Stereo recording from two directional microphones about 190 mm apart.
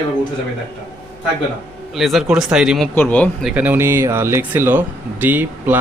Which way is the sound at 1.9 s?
Centre (ahead or behind).